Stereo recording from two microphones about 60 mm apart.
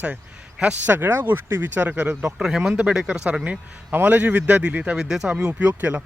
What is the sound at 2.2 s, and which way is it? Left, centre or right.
Speech, centre.